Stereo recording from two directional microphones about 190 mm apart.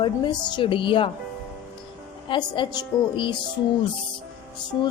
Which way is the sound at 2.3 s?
25° left (ahead or behind).